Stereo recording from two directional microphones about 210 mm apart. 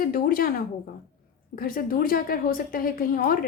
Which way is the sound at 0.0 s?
45° left (ahead or behind).